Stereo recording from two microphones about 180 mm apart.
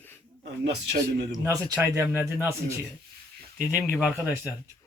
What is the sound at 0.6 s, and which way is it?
Speech, 70° right (ahead or behind).